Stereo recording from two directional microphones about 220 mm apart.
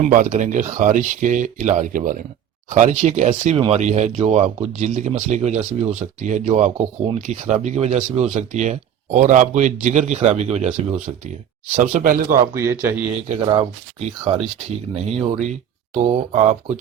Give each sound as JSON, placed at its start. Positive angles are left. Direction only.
{"t": 0.0, "sound": "speech", "side_deg": -35}
{"t": 12.5, "sound": "a man's voice", "side_deg": -10}
{"t": 13.2, "sound": "speech", "side_deg": -25}